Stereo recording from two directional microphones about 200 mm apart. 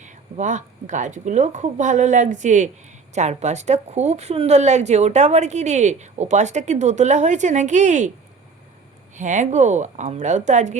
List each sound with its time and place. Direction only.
0.0 s a woman's voice: 35° right (ahead or behind)
9.1 s a woman's voice: 40° right (ahead or behind)